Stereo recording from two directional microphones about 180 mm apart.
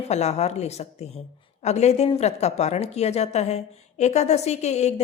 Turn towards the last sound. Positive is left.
turn(degrees=40)  # may be behind; listen again after turning